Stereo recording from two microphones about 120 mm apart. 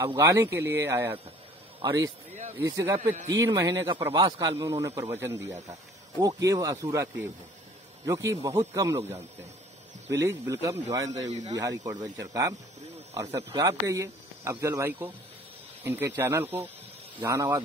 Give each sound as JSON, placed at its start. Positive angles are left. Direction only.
{"t": 0.0, "sound": "speech", "side_deg": -30}
{"t": 4.1, "sound": "a man's voice", "side_deg": -40}
{"t": 4.6, "sound": "speech", "side_deg": -25}